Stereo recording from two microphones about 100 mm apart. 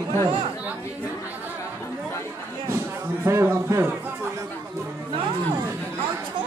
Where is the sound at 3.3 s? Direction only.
30° right (ahead or behind).